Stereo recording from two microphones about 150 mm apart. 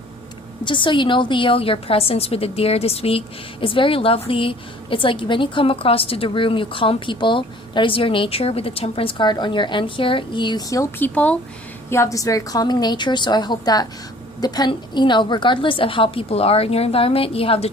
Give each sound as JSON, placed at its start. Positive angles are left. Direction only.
{"t": 0.6, "sound": "a woman's voice", "side_deg": 35}
{"t": 11.1, "sound": "speech", "side_deg": 10}
{"t": 11.9, "sound": "a woman's voice", "side_deg": 20}